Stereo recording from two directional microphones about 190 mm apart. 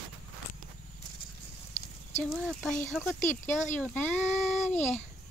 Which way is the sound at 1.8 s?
35° left (ahead or behind).